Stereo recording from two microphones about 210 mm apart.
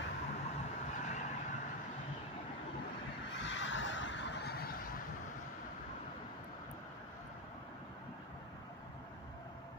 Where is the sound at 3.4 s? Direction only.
60° left (ahead or behind).